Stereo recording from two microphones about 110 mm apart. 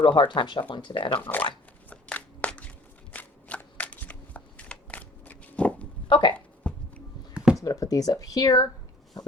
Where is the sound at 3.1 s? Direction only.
15° left (ahead or behind).